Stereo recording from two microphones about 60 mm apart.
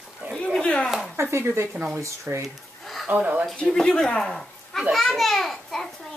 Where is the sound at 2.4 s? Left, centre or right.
Centre.